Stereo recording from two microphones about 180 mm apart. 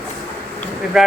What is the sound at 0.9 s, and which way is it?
Speech, centre (ahead or behind).